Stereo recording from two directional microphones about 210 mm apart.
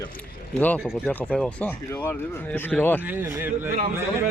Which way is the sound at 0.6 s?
5° left (ahead or behind).